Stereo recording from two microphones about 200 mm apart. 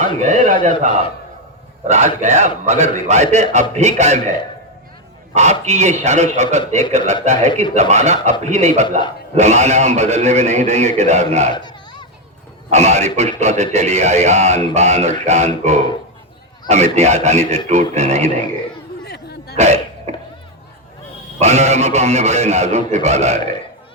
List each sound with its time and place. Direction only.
0.0 s a sound: 35° right (ahead or behind)
0.6 s speech: 35° right (ahead or behind)
5.3 s speech: 35° right (ahead or behind)
11.5 s children playing: 20° left (ahead or behind)
12.7 s speech: 35° right (ahead or behind)
19.0 s a sound: 55° left (ahead or behind)
19.5 s speech: 35° right (ahead or behind)
20.1 s a sound: 35° right (ahead or behind)
21.3 s speech: 35° right (ahead or behind)